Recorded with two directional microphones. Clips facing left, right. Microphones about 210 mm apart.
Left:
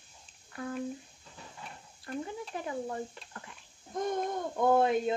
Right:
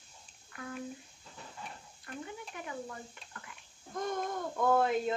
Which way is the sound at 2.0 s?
35° left (ahead or behind).